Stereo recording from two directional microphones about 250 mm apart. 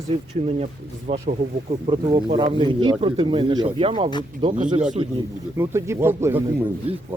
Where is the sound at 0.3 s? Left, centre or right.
Right.